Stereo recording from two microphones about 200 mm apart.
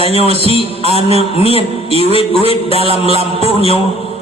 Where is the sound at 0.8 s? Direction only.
30° right (ahead or behind).